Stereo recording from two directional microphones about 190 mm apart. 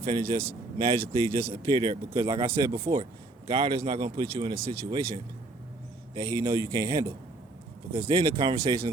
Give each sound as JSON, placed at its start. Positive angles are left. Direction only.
{"t": 0.0, "sound": "speech", "side_deg": -30}
{"t": 8.1, "sound": "speech", "side_deg": -25}